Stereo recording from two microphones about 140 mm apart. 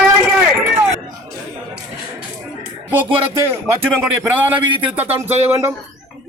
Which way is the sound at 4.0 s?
15° right (ahead or behind).